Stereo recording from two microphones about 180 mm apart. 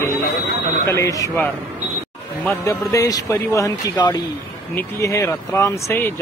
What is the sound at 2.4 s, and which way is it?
Speech, 15° left (ahead or behind).